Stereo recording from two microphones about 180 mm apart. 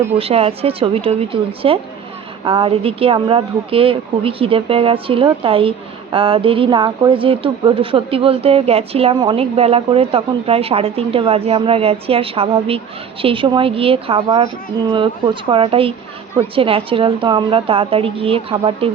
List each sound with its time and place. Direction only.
0.2 s a woman's voice: 30° right (ahead or behind)